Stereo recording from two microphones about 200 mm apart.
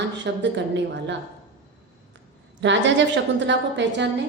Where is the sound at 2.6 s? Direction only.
60° right (ahead or behind).